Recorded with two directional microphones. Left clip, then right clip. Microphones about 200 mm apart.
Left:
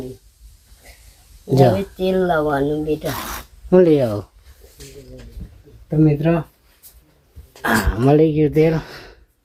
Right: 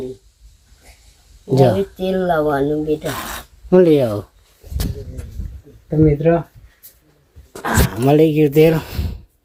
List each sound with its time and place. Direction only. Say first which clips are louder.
1.5 s speech: right 1 dB; centre (ahead or behind)
3.0 s speech: right 1 dB; 20° right (ahead or behind)
3.7 s speech: right 1 dB; 5° right (ahead or behind)
5.9 s speech: right 3 dB; 10° left (ahead or behind)
8.0 s speech: right 2 dB; centre (ahead or behind)